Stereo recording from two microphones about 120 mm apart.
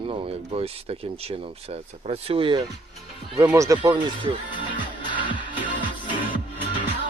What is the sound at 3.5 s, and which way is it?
Speech, 30° right (ahead or behind).